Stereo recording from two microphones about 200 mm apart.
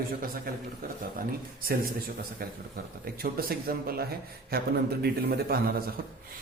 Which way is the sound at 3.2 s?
50° right (ahead or behind).